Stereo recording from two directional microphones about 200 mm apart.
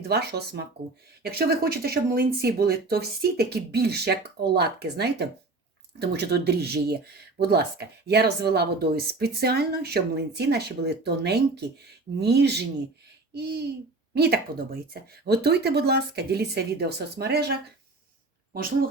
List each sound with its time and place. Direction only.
0.1 s speech: 55° right (ahead or behind)